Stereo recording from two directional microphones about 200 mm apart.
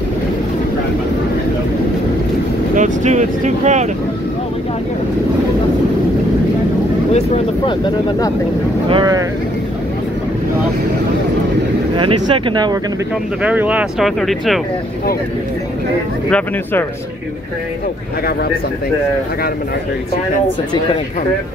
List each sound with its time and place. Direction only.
2.7 s speech: 35° right (ahead or behind)
7.1 s speech: 25° left (ahead or behind)
8.8 s speech: 20° right (ahead or behind)
12.0 s speech: 25° right (ahead or behind)
13.4 s speech: 5° right (ahead or behind)
16.3 s speech: 5° left (ahead or behind)